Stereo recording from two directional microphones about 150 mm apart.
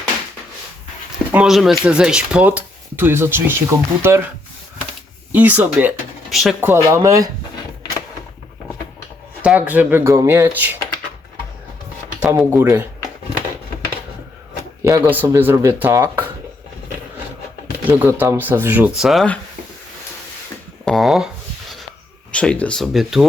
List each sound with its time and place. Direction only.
1.3 s speech: 5° right (ahead or behind)
5.3 s speech: 10° right (ahead or behind)
6.6 s speech: 15° right (ahead or behind)
9.4 s speech: 10° right (ahead or behind)
12.3 s speech: 15° right (ahead or behind)
14.8 s speech: 20° right (ahead or behind)
17.8 s speech: 10° right (ahead or behind); by 19.4 s 5° left (ahead or behind)
20.8 s a sound: centre (ahead or behind)
22.3 s speech: 10° left (ahead or behind)